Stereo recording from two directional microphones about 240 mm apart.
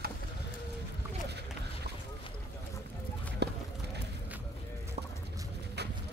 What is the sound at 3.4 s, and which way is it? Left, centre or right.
Run, right.